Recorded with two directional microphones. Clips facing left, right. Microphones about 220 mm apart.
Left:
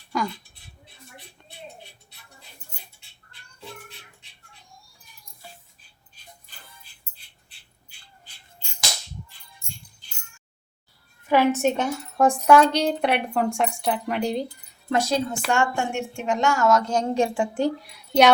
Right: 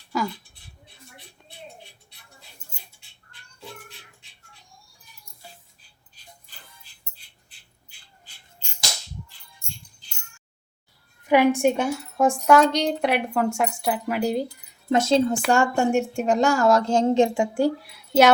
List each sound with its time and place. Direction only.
0.1 s speech: 5° right (ahead or behind)
1.4 s a sound: 5° right (ahead or behind)
11.3 s speech: 15° right (ahead or behind)
14.8 s a woman's voice: 25° right (ahead or behind); by 18.3 s 5° right (ahead or behind)